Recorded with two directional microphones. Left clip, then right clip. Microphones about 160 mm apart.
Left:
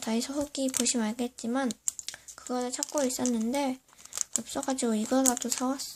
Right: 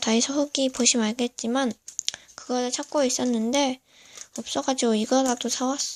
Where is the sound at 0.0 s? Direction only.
25° right (ahead or behind).